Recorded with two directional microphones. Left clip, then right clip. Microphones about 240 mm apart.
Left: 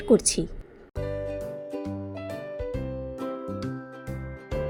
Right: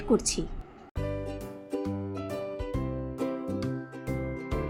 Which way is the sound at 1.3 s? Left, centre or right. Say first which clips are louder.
Left 4 dB; centre.